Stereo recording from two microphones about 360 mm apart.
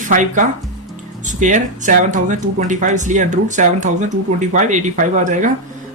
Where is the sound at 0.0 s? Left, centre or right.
Right.